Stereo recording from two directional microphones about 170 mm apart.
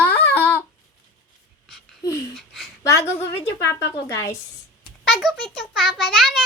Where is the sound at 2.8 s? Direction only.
15° left (ahead or behind).